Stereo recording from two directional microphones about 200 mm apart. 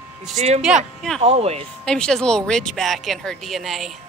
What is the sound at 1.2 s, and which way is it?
Speech, 30° right (ahead or behind).